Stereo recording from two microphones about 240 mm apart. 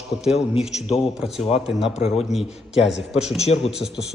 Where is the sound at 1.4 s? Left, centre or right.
Left.